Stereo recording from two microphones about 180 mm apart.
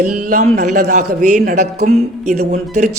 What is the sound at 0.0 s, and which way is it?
A man's voice, 55° right (ahead or behind).